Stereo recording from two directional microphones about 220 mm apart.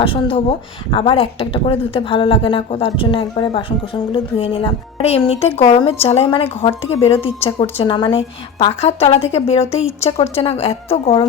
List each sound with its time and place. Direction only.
0.0 s speech: 25° left (ahead or behind)